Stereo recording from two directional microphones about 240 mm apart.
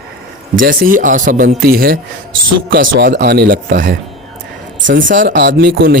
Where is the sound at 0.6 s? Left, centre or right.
Right.